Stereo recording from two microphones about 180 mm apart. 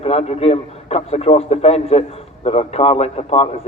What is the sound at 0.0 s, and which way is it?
A man's voice, 35° left (ahead or behind).